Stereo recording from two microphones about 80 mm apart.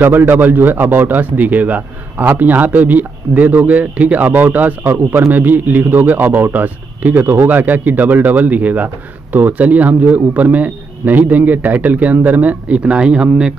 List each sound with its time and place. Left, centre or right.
0.0 s a man's voice: right